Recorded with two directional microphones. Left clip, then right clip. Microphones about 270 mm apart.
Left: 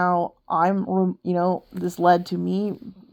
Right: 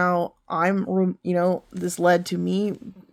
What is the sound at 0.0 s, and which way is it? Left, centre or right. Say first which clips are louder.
Speech: left 1 dB; centre.